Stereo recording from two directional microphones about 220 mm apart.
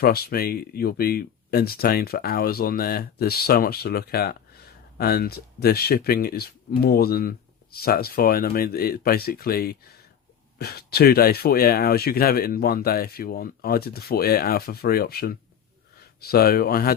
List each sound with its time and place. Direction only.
0.0 s speech: 45° left (ahead or behind)